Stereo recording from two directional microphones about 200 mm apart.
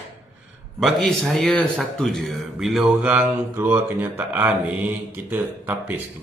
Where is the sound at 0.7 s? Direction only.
Centre (ahead or behind).